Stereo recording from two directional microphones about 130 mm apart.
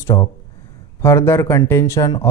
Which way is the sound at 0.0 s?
25° left (ahead or behind).